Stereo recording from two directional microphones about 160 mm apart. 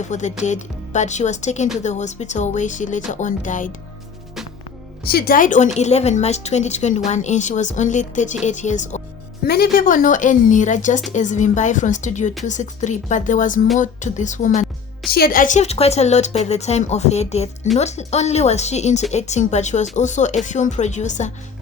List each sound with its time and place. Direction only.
0.0 s speech: 50° left (ahead or behind)
5.0 s speech: 75° left (ahead or behind); by 9.0 s 50° left (ahead or behind)
9.5 s speech: 70° left (ahead or behind); by 14.7 s 50° left (ahead or behind)
15.1 s speech: 70° left (ahead or behind); by 21.3 s 50° left (ahead or behind)